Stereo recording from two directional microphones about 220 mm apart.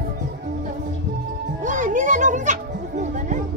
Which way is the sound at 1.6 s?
35° right (ahead or behind).